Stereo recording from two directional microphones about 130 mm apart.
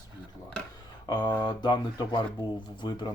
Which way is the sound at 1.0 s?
35° left (ahead or behind).